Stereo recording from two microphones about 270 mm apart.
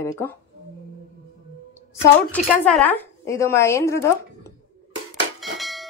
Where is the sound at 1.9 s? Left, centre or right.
Centre.